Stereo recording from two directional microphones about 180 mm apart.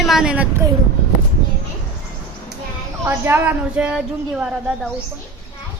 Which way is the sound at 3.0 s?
10° right (ahead or behind).